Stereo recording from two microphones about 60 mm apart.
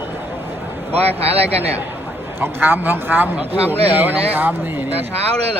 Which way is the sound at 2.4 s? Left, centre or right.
Right.